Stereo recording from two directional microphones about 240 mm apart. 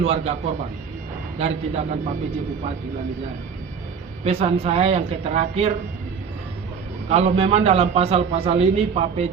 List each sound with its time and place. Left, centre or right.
0.0 s a man's voice: right
1.4 s a man's voice: right
4.2 s a man's voice: right
7.1 s a man's voice: right